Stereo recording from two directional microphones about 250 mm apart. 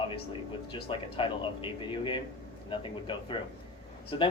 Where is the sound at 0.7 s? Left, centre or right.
Left.